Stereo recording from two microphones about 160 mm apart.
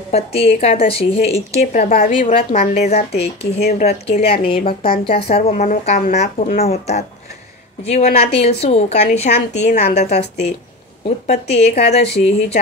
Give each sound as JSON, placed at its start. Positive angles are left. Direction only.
{"t": 0.1, "sound": "speech", "side_deg": 40}
{"t": 1.6, "sound": "a woman's voice", "side_deg": 55}
{"t": 6.6, "sound": "a woman's voice", "side_deg": 40}